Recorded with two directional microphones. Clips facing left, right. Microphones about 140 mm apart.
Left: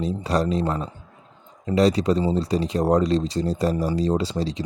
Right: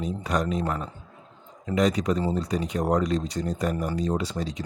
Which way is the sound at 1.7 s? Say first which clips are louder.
Left 4 dB; 30° left (ahead or behind).